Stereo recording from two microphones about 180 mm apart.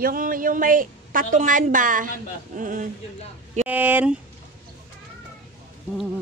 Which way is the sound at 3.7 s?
10° right (ahead or behind).